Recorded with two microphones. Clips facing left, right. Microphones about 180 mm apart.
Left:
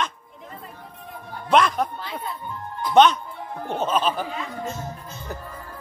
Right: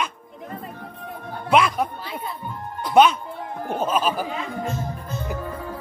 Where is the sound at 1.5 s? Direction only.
10° right (ahead or behind).